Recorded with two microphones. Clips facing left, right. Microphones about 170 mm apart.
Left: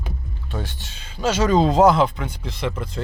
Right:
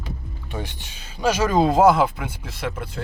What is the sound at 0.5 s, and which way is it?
Speech, 15° right (ahead or behind).